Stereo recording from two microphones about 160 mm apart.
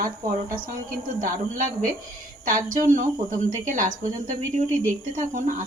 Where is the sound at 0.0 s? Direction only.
60° right (ahead or behind).